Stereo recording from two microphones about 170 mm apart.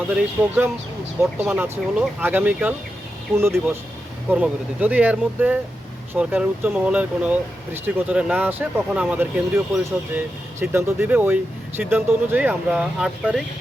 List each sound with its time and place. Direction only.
0.1 s speech: 5° right (ahead or behind)
4.3 s speech: 10° right (ahead or behind)